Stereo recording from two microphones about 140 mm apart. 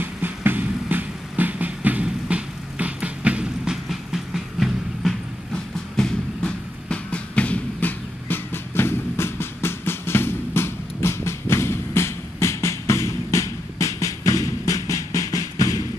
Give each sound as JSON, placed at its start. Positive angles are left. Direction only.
{"t": 0.0, "sound": "vehicle", "side_deg": -15}